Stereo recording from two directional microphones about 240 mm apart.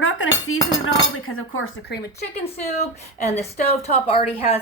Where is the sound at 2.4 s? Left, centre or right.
Left.